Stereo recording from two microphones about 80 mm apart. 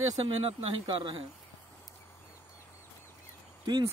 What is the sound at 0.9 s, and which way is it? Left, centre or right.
Speech, right.